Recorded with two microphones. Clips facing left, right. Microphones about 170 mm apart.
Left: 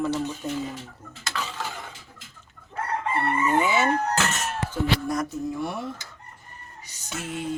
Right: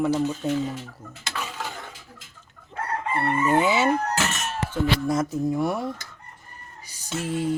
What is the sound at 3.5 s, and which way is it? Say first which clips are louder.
Speech: right 2 dB; 10° right (ahead or behind).